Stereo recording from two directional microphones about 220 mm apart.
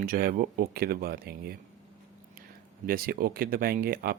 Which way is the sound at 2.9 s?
40° right (ahead or behind).